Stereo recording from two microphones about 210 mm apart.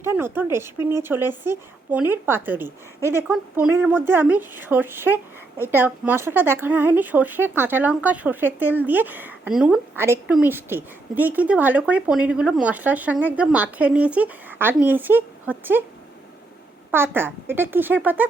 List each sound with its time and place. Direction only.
0.0 s speech: 10° right (ahead or behind)
16.9 s speech: 10° right (ahead or behind)